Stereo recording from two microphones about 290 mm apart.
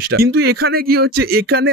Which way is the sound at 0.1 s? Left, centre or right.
Right.